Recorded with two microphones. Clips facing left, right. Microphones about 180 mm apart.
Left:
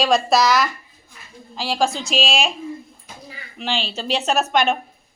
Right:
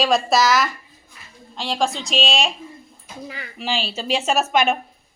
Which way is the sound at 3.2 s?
70° right (ahead or behind).